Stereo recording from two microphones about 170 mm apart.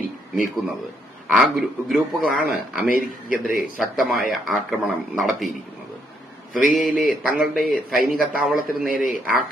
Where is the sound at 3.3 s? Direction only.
55° left (ahead or behind).